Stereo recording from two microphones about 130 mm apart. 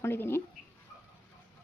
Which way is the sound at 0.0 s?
20° left (ahead or behind).